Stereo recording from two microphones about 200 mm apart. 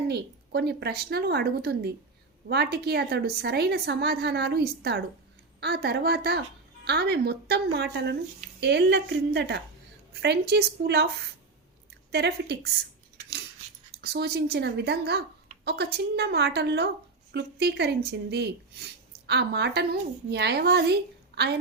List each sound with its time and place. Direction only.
0.1 s a woman's voice: 55° right (ahead or behind)
12.1 s speech: 55° right (ahead or behind)
13.9 s a woman's voice: 55° right (ahead or behind)